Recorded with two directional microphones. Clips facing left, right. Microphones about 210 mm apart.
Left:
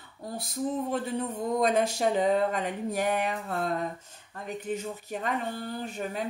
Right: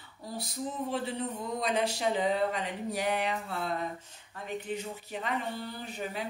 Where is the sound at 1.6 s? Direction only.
50° left (ahead or behind).